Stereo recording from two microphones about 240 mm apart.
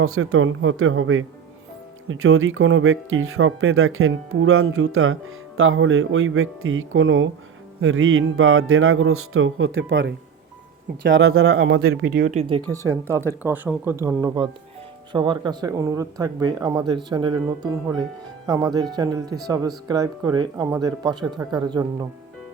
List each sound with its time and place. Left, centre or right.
0.0 s speech: right
11.1 s speech: right
12.1 s speech: right
12.7 s speech: centre